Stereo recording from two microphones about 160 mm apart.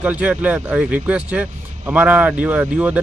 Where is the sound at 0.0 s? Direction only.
10° right (ahead or behind).